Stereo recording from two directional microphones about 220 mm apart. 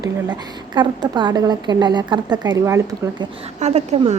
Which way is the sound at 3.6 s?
30° right (ahead or behind).